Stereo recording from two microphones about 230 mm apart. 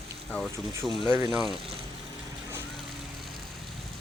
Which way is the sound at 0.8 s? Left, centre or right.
Centre.